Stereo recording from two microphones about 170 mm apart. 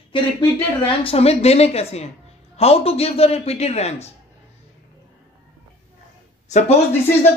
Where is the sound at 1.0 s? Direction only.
35° left (ahead or behind).